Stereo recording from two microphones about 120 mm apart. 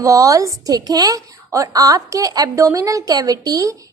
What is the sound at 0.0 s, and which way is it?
A woman's voice, 25° right (ahead or behind).